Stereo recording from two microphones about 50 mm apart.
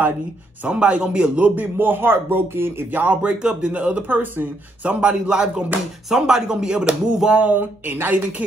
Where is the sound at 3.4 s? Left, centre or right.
Centre; by 4.9 s right.